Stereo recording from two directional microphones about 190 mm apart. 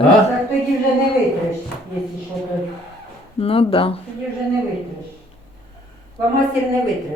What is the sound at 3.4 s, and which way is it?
Speech, 30° left (ahead or behind).